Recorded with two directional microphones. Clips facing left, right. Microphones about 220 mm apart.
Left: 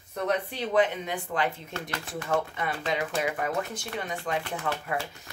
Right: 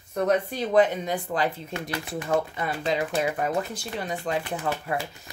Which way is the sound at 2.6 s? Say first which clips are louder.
Right 3 dB; 35° right (ahead or behind).